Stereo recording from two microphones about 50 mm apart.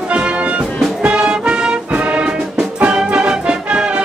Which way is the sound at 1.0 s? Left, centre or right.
Right.